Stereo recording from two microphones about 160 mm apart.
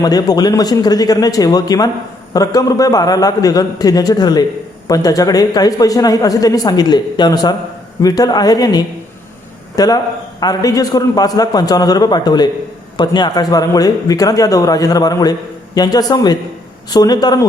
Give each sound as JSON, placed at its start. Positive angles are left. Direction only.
{"t": 0.0, "sound": "speech", "side_deg": 25}